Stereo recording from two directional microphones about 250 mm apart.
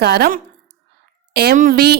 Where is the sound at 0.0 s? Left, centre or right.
Right.